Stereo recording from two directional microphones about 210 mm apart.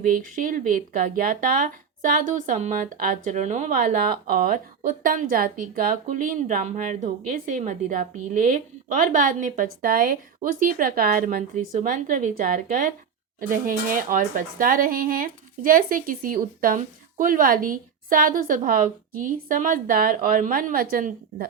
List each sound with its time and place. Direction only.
0.0 s speech: 40° right (ahead or behind)